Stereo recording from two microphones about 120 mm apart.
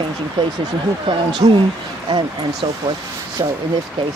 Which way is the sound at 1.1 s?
40° right (ahead or behind).